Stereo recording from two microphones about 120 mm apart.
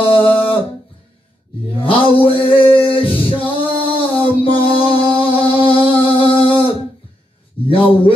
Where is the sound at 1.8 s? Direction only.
45° left (ahead or behind).